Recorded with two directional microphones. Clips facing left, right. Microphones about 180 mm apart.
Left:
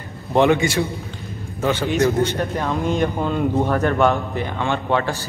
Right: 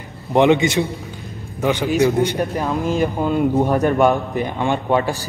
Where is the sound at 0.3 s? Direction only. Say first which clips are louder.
Right 2 dB; 15° right (ahead or behind).